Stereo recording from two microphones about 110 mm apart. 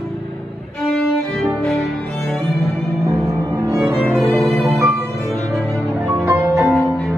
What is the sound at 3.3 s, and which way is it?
Cello, 30° right (ahead or behind).